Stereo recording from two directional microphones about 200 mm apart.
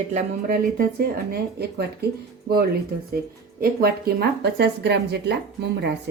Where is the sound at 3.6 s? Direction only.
50° right (ahead or behind).